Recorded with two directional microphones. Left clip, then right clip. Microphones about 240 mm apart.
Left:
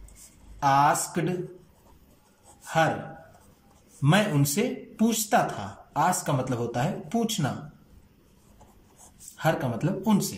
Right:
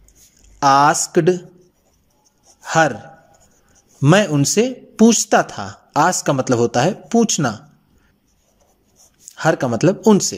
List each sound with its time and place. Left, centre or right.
0.6 s speech: right
2.6 s gasp: right
4.0 s speech: right
9.6 s speech: right